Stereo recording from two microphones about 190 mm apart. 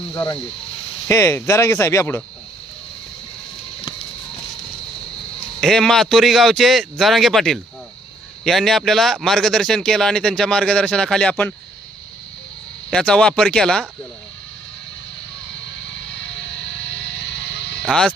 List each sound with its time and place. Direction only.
1.0 s speech: 15° left (ahead or behind)
5.5 s speech: centre (ahead or behind)
12.9 s speech: 5° left (ahead or behind)
17.2 s music: 70° left (ahead or behind)
17.8 s speech: 5° left (ahead or behind)